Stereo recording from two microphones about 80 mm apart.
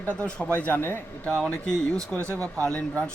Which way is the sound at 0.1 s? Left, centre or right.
Centre.